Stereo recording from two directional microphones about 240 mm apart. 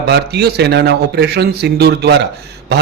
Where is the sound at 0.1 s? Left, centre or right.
Right.